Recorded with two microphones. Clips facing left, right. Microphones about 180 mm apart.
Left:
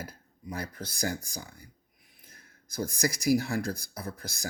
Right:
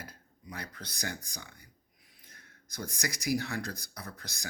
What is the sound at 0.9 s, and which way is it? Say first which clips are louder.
Speech: left 7 dB; 35° left (ahead or behind).